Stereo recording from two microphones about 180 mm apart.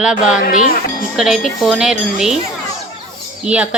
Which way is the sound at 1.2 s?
5° right (ahead or behind).